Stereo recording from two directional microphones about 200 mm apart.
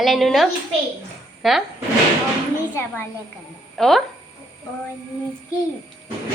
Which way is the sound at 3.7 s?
Centre (ahead or behind).